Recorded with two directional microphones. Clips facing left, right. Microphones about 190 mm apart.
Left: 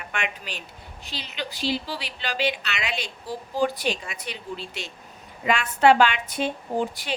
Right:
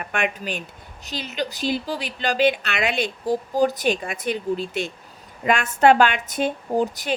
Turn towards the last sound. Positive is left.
turn(degrees=-45)  # may be behind; listen again after turning